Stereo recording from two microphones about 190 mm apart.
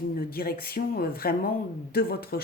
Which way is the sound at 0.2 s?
50° left (ahead or behind).